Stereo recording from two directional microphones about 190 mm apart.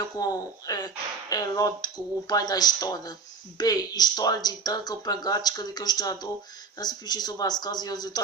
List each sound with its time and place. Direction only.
0.2 s speech: 20° left (ahead or behind)